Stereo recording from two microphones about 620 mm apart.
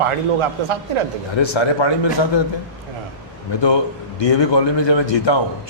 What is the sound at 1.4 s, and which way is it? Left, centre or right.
A man's voice, left.